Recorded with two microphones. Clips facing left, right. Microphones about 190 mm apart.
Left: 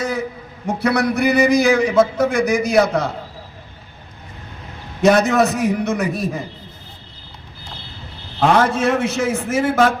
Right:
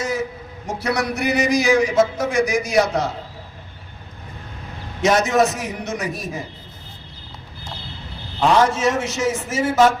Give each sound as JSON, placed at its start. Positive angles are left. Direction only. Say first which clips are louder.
{"t": 0.7, "sound": "a man's voice", "louder": "left 5 dB", "side_deg": 60}
{"t": 5.0, "sound": "a man's voice", "louder": "left 3 dB", "side_deg": 60}
{"t": 8.4, "sound": "a man's voice", "louder": "left 1 dB", "side_deg": 55}